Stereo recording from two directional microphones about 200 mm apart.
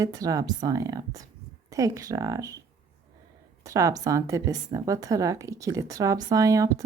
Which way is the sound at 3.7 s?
15° right (ahead or behind).